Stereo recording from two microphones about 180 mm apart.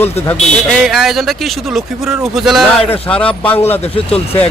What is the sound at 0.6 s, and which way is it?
A man's voice, centre (ahead or behind).